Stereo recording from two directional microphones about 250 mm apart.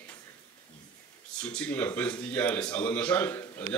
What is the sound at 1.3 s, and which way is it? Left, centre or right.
Speech, centre.